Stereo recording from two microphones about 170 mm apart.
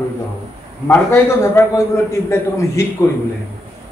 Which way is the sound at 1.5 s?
15° left (ahead or behind).